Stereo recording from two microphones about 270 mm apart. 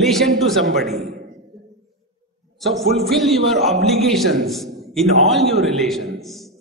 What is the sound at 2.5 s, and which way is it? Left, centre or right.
A man's voice, centre.